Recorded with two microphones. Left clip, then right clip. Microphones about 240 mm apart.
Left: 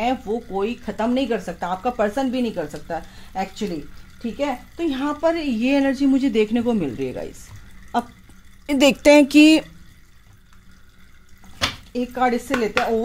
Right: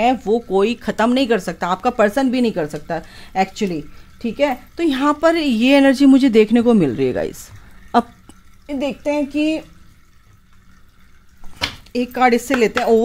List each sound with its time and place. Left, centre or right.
0.0 s a woman's voice: right
8.6 s a woman's voice: left
11.9 s speech: right